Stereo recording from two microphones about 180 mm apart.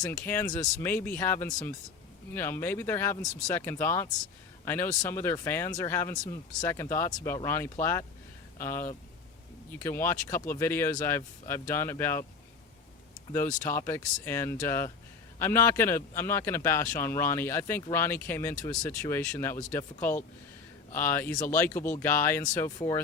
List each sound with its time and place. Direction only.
0.0 s a man's voice: 15° left (ahead or behind)
13.3 s a man's voice: 15° left (ahead or behind)